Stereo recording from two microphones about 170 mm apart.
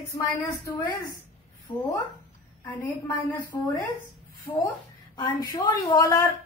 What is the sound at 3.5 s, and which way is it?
A woman's voice, 20° left (ahead or behind).